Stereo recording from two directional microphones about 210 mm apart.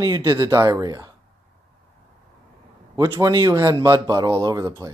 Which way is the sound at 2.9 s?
20° right (ahead or behind).